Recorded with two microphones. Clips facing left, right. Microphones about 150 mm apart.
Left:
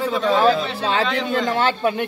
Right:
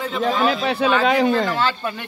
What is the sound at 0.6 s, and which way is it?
Speech, 65° right (ahead or behind).